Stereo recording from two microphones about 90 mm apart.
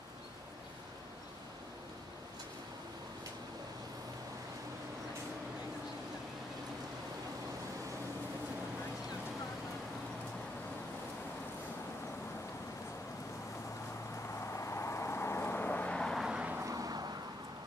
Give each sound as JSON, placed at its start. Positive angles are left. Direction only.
{"t": 14.6, "sound": "vehicle", "side_deg": 30}
{"t": 16.2, "sound": "vehicle", "side_deg": -10}
{"t": 16.6, "sound": "vehicle", "side_deg": -40}